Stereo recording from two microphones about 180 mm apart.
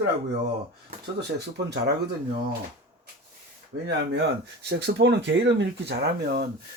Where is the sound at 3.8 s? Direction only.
75° right (ahead or behind).